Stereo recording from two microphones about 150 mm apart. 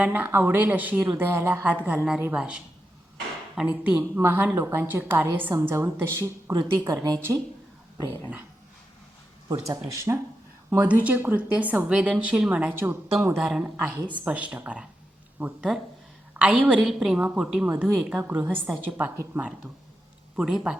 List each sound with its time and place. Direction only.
0.0 s a woman's voice: 10° right (ahead or behind)
3.8 s a woman's voice: 10° right (ahead or behind)
7.9 s speech: 25° left (ahead or behind)
9.5 s a woman's voice: 20° right (ahead or behind)
20.3 s speech: 5° right (ahead or behind)